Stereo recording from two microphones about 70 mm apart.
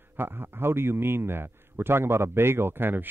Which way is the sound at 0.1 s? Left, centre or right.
Right.